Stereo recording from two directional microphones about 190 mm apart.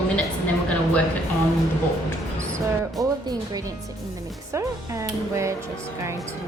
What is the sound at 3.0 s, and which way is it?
A woman's voice, 20° right (ahead or behind).